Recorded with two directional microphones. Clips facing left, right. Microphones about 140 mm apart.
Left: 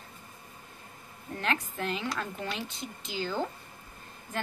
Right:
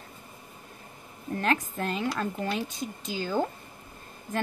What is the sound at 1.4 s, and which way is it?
A woman's voice, 40° right (ahead or behind).